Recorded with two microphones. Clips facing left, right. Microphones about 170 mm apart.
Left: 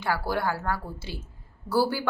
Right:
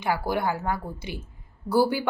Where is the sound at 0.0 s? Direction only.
15° right (ahead or behind).